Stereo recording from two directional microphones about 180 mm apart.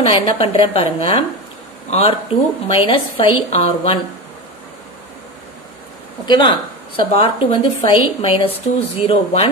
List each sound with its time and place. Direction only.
0.0 s a woman's voice: 30° left (ahead or behind)
6.2 s a woman's voice: 25° left (ahead or behind)